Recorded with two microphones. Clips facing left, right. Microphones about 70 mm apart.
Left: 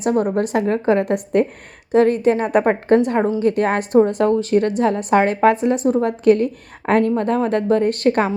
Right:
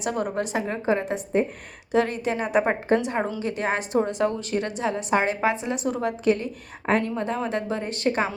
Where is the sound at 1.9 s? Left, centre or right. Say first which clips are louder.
Left 9 dB; left.